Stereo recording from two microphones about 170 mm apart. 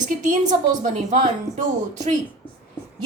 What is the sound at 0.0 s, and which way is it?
A woman's voice, 45° right (ahead or behind).